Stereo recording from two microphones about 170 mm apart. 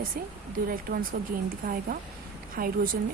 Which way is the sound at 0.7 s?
60° right (ahead or behind).